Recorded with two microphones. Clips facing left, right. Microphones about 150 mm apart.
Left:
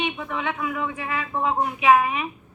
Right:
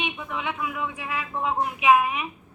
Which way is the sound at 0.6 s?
45° left (ahead or behind).